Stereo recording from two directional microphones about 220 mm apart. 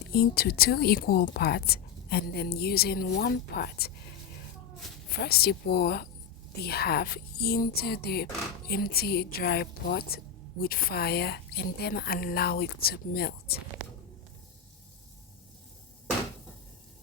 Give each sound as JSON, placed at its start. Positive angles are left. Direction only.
{"t": 0.1, "sound": "speech", "side_deg": 45}
{"t": 5.2, "sound": "speech", "side_deg": 45}